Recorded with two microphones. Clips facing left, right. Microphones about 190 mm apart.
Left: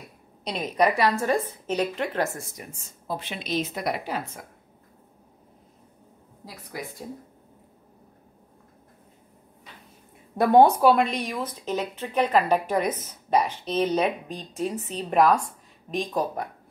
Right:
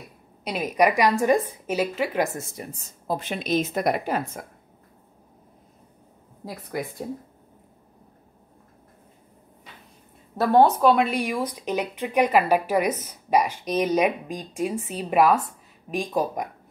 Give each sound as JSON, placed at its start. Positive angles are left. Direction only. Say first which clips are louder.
{"t": 0.4, "sound": "a woman's voice", "louder": "right 2 dB", "side_deg": -5}
{"t": 2.5, "sound": "a woman's voice", "louder": "right 5 dB", "side_deg": -35}
{"t": 6.4, "sound": "a woman's voice", "louder": "right 8 dB", "side_deg": -55}
{"t": 10.3, "sound": "speech", "louder": "left 1 dB", "side_deg": 15}
{"t": 10.9, "sound": "a woman's voice", "louder": "right 1 dB", "side_deg": -5}